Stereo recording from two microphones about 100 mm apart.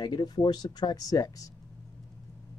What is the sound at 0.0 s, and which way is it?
Speech, 45° left (ahead or behind).